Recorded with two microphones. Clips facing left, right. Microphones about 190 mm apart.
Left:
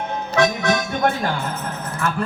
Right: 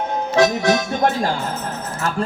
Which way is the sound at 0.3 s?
30° right (ahead or behind).